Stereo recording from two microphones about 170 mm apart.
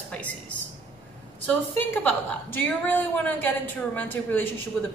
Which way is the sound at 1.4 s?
10° left (ahead or behind).